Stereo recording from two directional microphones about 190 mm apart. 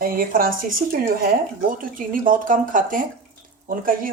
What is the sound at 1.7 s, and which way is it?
Speech, 45° right (ahead or behind).